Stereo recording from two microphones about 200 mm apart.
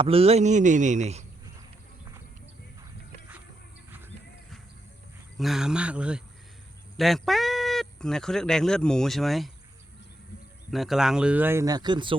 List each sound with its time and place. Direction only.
0.0 s speech: 30° right (ahead or behind)
5.4 s speech: centre (ahead or behind)
10.7 s speech: centre (ahead or behind); by 12.1 s 25° right (ahead or behind)